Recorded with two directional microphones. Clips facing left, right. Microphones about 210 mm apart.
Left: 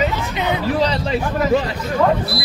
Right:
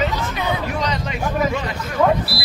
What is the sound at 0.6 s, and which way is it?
Speech, 35° left (ahead or behind).